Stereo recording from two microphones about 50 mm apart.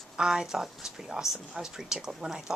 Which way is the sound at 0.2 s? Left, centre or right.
Centre.